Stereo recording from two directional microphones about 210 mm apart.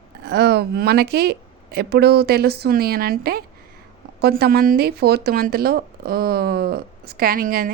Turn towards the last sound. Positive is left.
turn(degrees=-40)  # may be behind; listen again after turning